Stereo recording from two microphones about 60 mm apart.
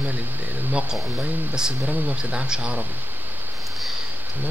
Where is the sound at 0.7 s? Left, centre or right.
Centre.